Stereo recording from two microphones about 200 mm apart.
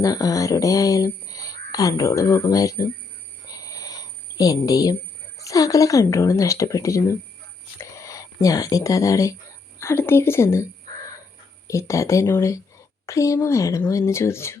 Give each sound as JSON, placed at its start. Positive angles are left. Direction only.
{"t": 0.0, "sound": "speech", "side_deg": 15}
{"t": 3.4, "sound": "a sound", "side_deg": 15}
{"t": 5.4, "sound": "speech", "side_deg": 15}
{"t": 11.7, "sound": "speech", "side_deg": 15}